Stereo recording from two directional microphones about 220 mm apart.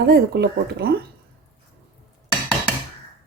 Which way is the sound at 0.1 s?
45° right (ahead or behind).